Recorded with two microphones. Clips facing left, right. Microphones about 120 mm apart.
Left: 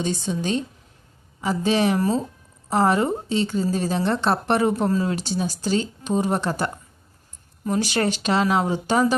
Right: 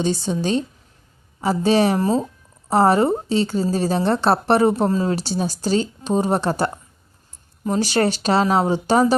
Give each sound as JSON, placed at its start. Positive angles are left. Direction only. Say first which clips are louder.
{"t": 0.0, "sound": "a woman's voice", "louder": "right 4 dB", "side_deg": -35}